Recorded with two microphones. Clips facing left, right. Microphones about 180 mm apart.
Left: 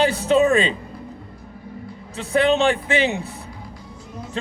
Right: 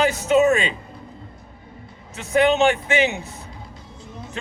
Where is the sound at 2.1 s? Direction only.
35° left (ahead or behind).